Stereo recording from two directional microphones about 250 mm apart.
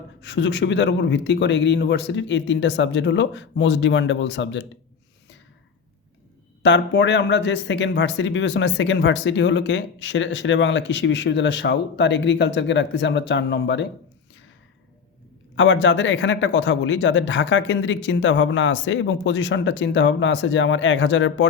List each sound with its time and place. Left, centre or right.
0.2 s speech: left
6.6 s speech: left
15.5 s speech: left